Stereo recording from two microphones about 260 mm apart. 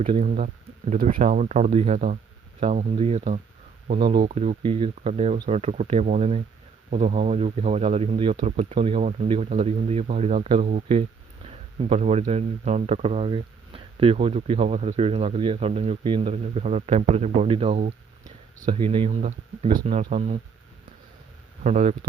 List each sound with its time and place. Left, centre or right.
0.0 s speech: right
21.6 s speech: right